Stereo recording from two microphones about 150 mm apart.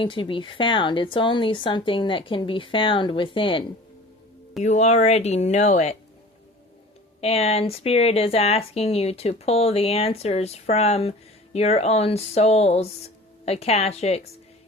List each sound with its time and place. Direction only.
0.0 s speech: 35° left (ahead or behind)
4.6 s speech: 50° left (ahead or behind)
7.2 s speech: 40° left (ahead or behind)